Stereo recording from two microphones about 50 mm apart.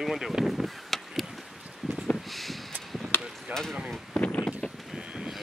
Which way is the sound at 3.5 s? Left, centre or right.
Right.